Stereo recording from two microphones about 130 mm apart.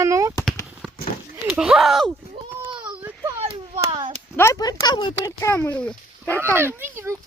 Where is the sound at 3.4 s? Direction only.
50° right (ahead or behind).